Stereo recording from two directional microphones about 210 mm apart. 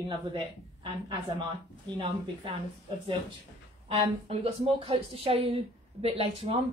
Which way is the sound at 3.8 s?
25° right (ahead or behind).